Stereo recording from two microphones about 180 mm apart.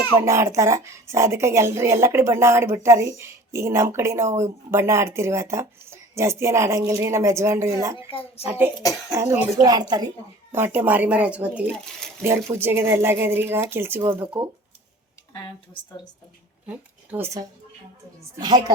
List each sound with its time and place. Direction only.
0.3 s speech: 15° right (ahead or behind)
7.9 s a woman's voice: 30° left (ahead or behind)
8.4 s speech: 10° right (ahead or behind)
16.6 s speech: 10° right (ahead or behind)